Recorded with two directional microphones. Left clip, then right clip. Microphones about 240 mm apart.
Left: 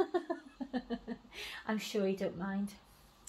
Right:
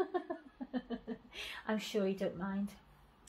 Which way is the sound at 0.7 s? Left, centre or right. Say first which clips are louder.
Left 1 dB; left.